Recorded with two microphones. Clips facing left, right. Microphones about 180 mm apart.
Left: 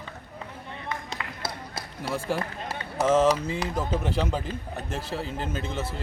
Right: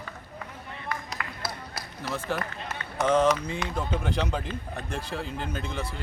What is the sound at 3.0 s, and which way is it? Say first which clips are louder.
Speech: left 2 dB; 30° left (ahead or behind).